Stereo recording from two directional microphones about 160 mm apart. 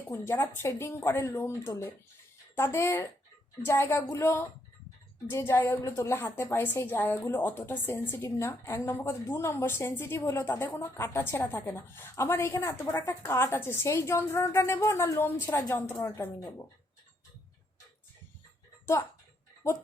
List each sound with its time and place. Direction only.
0.1 s a woman's voice: 15° left (ahead or behind)